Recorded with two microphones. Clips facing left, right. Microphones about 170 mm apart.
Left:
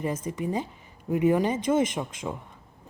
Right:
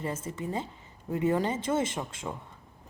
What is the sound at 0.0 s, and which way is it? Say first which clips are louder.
Speech: left 5 dB; 15° left (ahead or behind).